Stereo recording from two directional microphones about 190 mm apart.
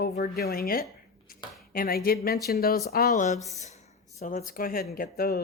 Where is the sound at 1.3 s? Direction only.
50° left (ahead or behind).